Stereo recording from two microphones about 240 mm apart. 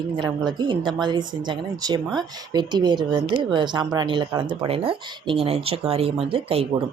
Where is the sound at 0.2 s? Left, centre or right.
Centre.